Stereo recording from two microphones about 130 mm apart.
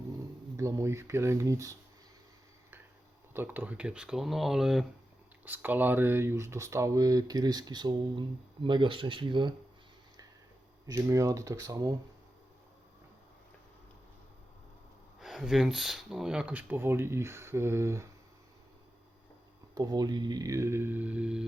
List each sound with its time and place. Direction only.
0.5 s speech: 20° right (ahead or behind)
3.3 s speech: 15° right (ahead or behind)
5.5 s speech: 15° right (ahead or behind); by 9.6 s 40° right (ahead or behind)
10.8 s speech: 25° right (ahead or behind)
15.2 s speech: 5° right (ahead or behind); by 18.0 s 20° right (ahead or behind)
19.7 s speech: 30° right (ahead or behind); by 21.4 s 10° right (ahead or behind)